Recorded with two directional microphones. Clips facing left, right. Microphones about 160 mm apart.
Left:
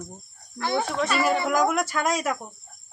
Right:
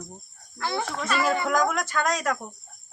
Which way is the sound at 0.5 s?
20° left (ahead or behind).